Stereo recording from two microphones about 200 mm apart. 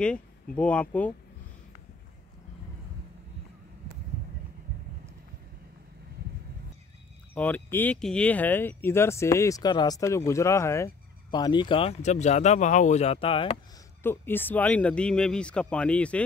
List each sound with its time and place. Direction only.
0.0 s speech: 5° left (ahead or behind)
7.3 s speech: 10° left (ahead or behind); by 13.6 s 25° left (ahead or behind)
14.0 s speech: 10° left (ahead or behind)